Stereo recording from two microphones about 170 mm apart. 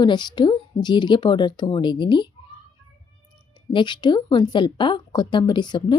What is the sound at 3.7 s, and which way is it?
Speech, 25° left (ahead or behind).